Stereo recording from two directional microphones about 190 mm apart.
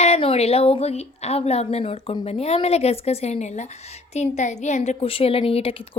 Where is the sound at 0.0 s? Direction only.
30° left (ahead or behind).